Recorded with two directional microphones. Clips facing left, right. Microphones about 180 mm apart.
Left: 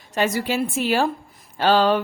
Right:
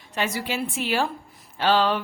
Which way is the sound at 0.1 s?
45° left (ahead or behind).